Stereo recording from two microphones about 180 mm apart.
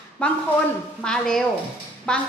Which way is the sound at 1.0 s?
5° left (ahead or behind).